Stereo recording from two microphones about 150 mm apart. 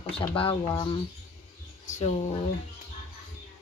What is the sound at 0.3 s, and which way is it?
Speech, 35° left (ahead or behind).